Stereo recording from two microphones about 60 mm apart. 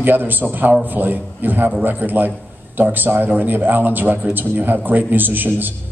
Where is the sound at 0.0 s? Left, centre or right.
Right.